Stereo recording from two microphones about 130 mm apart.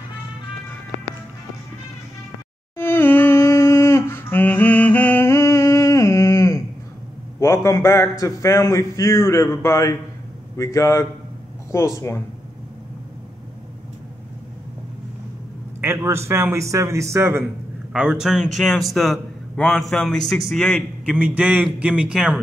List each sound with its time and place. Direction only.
2.8 s humming: 15° left (ahead or behind)
7.3 s a man's voice: 20° left (ahead or behind)
15.8 s a man's voice: 20° right (ahead or behind)
17.9 s a man's voice: 5° right (ahead or behind)
21.0 s a man's voice: 10° right (ahead or behind)